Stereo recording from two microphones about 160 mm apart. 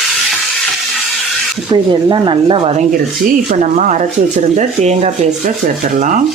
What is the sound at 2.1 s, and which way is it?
Speech, 30° right (ahead or behind).